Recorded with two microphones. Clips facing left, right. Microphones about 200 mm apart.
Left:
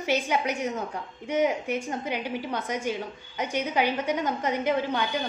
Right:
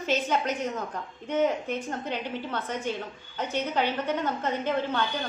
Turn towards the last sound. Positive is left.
turn(degrees=10)  # may be behind; listen again after turning